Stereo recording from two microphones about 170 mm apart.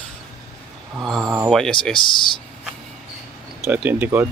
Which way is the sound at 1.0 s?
Centre (ahead or behind).